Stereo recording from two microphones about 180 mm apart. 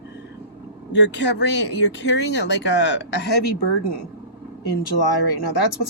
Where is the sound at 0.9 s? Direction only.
75° left (ahead or behind).